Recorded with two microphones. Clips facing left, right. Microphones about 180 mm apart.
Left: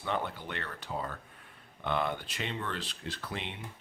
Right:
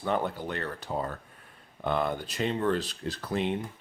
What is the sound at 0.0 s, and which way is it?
Speech, 45° right (ahead or behind).